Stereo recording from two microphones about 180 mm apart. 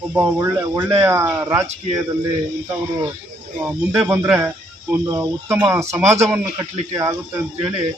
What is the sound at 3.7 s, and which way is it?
Speech, 10° right (ahead or behind).